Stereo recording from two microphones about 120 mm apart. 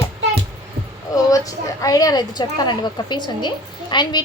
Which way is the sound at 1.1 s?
30° left (ahead or behind).